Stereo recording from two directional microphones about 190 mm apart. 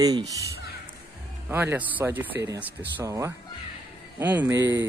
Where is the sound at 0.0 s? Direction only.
20° right (ahead or behind).